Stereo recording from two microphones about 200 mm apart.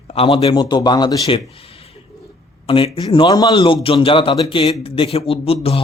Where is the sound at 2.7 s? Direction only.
25° left (ahead or behind).